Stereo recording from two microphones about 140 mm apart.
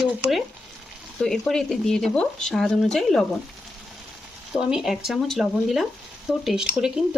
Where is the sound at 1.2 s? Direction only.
5° left (ahead or behind).